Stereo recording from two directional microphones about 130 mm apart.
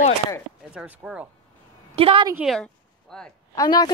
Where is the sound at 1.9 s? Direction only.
45° right (ahead or behind).